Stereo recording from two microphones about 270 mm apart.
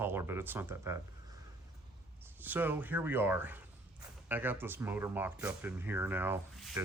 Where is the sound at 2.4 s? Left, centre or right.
Centre.